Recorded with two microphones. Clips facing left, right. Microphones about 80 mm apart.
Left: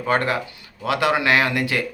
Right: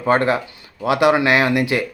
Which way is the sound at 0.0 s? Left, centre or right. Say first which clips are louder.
Right 4 dB; right.